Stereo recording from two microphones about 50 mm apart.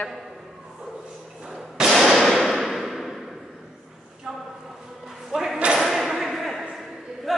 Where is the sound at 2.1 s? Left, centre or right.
Centre.